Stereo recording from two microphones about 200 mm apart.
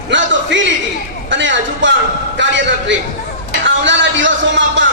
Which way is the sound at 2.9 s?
65° right (ahead or behind).